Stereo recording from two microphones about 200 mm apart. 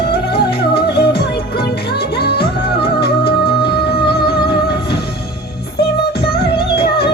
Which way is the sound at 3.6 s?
55° left (ahead or behind).